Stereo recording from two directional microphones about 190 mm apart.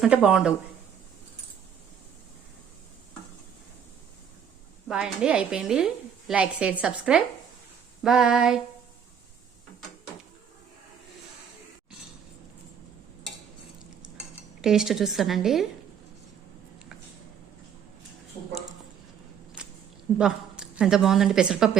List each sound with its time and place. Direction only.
0.0 s a woman's voice: 5° right (ahead or behind)
4.9 s a woman's voice: 5° right (ahead or behind)
14.6 s a woman's voice: 5° right (ahead or behind)
19.6 s a sound: 5° right (ahead or behind)
20.1 s a woman's voice: 5° right (ahead or behind)